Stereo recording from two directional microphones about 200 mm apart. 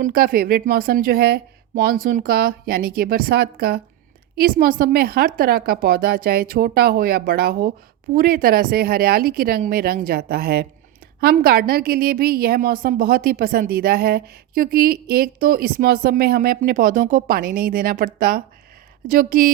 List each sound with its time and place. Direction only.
0.0 s a woman's voice: 45° right (ahead or behind)